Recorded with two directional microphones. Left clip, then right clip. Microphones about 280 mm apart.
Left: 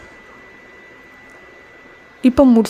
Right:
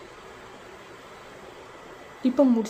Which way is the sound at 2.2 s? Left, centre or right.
Left.